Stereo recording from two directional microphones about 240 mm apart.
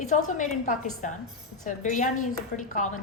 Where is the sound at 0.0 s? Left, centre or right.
Left.